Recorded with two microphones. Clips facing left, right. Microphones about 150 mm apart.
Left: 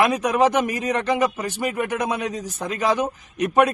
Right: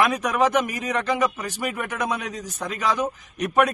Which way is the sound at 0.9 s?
30° left (ahead or behind).